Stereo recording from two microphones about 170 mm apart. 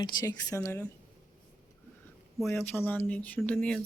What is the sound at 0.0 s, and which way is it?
Speech, 25° left (ahead or behind).